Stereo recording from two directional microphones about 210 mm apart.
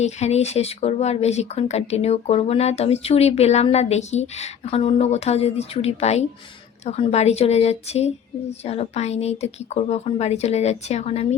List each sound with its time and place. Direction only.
0.0 s speech: 30° left (ahead or behind)